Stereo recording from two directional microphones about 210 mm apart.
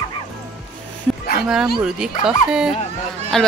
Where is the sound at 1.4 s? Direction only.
Centre (ahead or behind).